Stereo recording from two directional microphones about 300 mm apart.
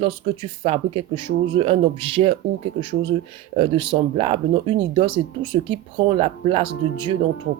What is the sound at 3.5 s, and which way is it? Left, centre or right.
Speech, centre.